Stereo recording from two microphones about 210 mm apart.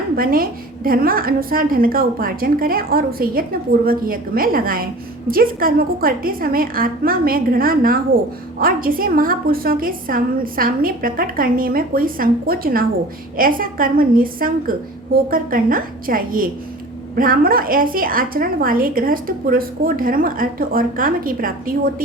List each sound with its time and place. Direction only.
0.2 s a woman's voice: 45° right (ahead or behind)